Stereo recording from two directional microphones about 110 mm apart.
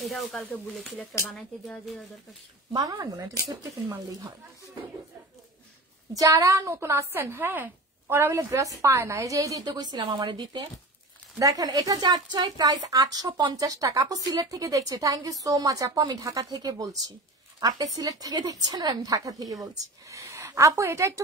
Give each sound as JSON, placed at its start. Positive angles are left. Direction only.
{"t": 0.0, "sound": "speech", "side_deg": 0}
{"t": 2.7, "sound": "speech", "side_deg": -35}
{"t": 6.1, "sound": "a woman's voice", "side_deg": -30}
{"t": 11.3, "sound": "a woman's voice", "side_deg": -30}